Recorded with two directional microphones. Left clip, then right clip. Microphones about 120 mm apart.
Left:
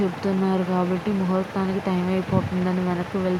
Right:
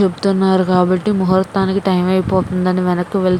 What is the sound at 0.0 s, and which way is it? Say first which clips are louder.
Speech: right 9 dB; 80° right.